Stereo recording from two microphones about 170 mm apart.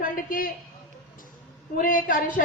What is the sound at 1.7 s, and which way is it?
Speech, 55° left (ahead or behind).